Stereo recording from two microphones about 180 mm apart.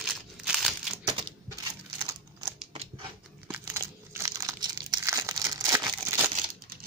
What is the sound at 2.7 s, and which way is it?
Scissors, 35° right (ahead or behind).